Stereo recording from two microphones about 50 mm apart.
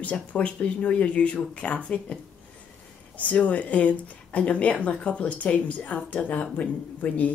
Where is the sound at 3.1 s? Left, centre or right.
Left.